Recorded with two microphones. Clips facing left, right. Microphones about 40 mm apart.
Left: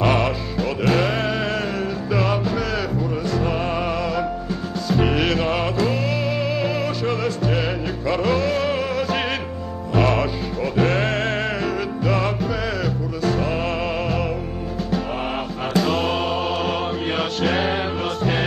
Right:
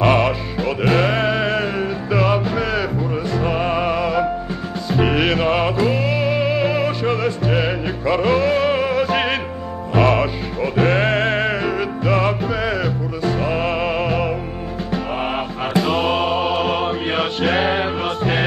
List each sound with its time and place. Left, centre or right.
0.0 s music: centre
15.7 s music: centre